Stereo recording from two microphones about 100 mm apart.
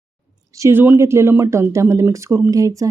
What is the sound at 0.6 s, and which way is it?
Speech, 20° right (ahead or behind).